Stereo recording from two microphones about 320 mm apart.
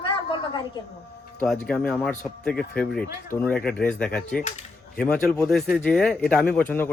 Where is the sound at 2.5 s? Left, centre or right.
Left.